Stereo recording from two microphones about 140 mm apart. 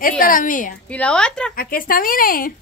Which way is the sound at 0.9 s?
5° left (ahead or behind).